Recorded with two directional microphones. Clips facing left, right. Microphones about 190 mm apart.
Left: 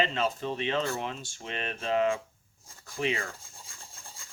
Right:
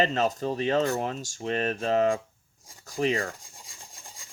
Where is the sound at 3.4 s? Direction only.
15° right (ahead or behind).